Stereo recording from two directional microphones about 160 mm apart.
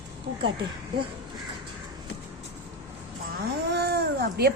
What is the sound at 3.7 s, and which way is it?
Speech, 85° right.